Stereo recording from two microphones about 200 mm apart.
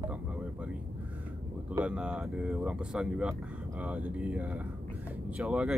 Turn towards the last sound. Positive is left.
turn(degrees=-5)  # may be behind; listen again after turning